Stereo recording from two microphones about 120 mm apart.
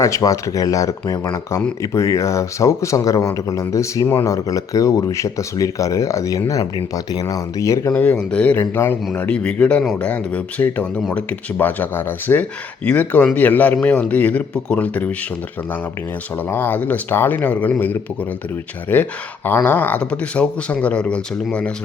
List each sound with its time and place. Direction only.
0.0 s speech: 25° left (ahead or behind)
7.9 s a man's voice: 10° left (ahead or behind)
16.5 s a man's voice: 15° left (ahead or behind)